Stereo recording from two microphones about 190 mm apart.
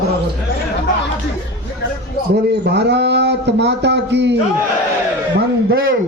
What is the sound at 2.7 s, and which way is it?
A man's voice, 60° right (ahead or behind).